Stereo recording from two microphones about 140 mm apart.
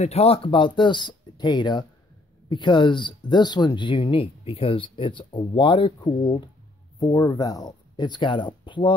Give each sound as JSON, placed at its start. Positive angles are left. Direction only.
{"t": 0.0, "sound": "speech", "side_deg": 45}